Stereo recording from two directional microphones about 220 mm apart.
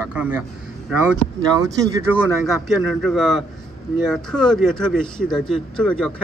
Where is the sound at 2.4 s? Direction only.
Centre (ahead or behind).